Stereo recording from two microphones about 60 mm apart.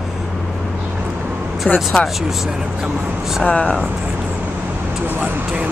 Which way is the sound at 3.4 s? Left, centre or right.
Left.